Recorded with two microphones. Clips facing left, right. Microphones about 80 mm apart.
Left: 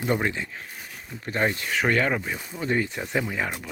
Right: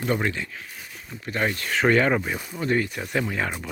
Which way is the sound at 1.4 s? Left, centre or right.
Centre.